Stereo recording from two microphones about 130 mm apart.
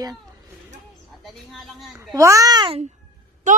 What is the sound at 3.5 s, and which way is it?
Speech, 80° right.